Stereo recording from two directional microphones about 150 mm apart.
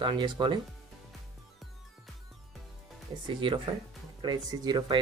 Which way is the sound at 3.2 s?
35° right (ahead or behind).